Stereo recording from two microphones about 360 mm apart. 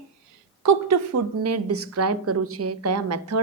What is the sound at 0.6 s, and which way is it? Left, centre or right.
A woman's voice, right.